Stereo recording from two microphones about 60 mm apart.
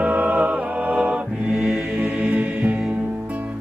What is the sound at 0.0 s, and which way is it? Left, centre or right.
Music, right.